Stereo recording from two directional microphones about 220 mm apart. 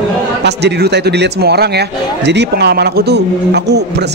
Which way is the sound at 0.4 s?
50° right (ahead or behind).